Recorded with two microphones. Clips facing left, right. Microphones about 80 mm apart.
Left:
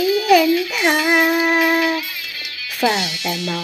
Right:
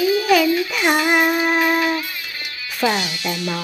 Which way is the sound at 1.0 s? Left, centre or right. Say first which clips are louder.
Left 1 dB; centre.